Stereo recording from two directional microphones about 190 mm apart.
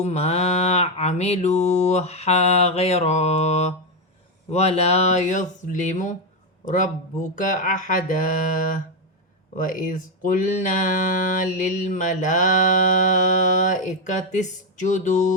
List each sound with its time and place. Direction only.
0.0 s speech: 35° left (ahead or behind)